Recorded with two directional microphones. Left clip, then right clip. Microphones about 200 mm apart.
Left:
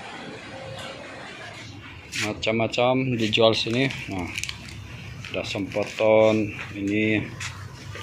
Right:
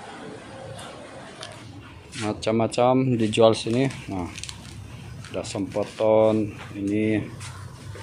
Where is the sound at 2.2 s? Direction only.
20° right (ahead or behind).